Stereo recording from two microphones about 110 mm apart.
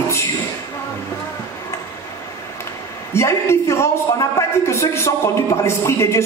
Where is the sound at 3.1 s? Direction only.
25° left (ahead or behind).